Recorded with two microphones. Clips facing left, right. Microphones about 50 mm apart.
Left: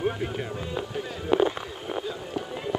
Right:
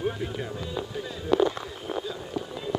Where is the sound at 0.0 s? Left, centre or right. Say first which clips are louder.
Left 2 dB; centre.